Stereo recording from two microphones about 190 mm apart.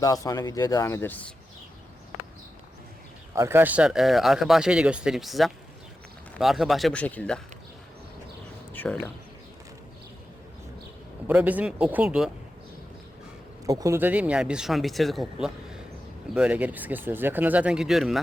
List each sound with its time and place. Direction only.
0.0 s speech: 20° left (ahead or behind)
3.3 s speech: 15° right (ahead or behind); by 7.4 s 5° left (ahead or behind)
8.7 s a sound: 10° left (ahead or behind)
11.3 s speech: 10° right (ahead or behind)
13.7 s speech: 15° right (ahead or behind); by 18.2 s centre (ahead or behind)